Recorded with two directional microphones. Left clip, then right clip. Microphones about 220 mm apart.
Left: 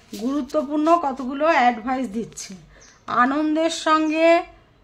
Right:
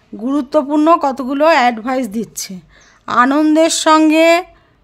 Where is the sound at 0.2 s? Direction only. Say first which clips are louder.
Right 8 dB; 35° right (ahead or behind).